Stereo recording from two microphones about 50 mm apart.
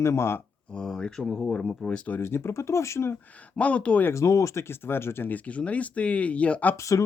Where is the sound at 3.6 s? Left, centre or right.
Left.